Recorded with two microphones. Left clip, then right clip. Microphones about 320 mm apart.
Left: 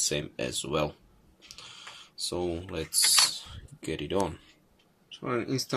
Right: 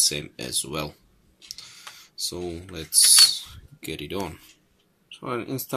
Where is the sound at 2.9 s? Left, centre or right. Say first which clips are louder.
Right 7 dB; centre.